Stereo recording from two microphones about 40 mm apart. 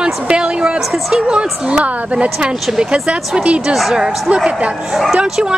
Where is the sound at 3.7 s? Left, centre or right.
Centre.